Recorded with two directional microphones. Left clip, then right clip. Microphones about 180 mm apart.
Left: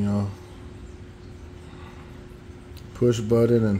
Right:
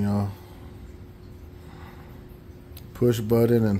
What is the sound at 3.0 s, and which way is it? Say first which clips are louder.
Speech: left 1 dB; centre (ahead or behind).